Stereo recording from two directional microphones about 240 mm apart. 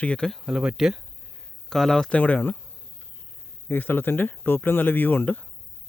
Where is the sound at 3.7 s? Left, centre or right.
Centre.